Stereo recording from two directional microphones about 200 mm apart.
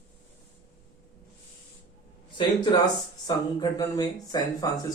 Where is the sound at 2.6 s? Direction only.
20° left (ahead or behind).